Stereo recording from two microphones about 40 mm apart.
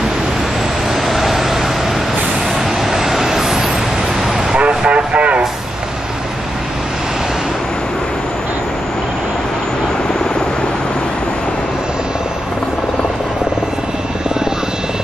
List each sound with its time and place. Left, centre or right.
1.0 s vehicle: centre
2.8 s vehicle: centre
4.6 s vehicle: right